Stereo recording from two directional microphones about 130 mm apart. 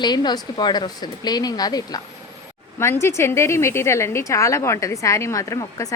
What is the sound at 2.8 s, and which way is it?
A woman's voice, 20° left (ahead or behind).